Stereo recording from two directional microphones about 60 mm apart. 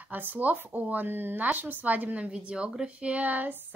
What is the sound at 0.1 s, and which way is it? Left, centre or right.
Speech, right.